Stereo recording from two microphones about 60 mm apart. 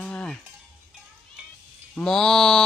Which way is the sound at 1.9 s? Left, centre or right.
Centre.